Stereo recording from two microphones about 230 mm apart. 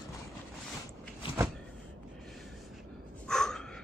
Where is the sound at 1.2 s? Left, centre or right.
Left.